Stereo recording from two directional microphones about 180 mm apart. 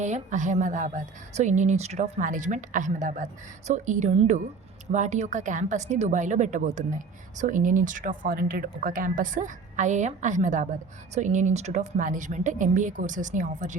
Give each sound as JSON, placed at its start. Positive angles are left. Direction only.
{"t": 0.0, "sound": "speech", "side_deg": -40}